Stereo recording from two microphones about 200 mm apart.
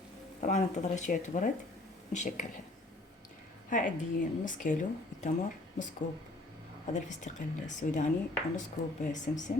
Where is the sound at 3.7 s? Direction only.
40° left (ahead or behind).